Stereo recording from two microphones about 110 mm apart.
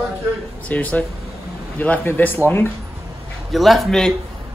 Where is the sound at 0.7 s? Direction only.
15° left (ahead or behind).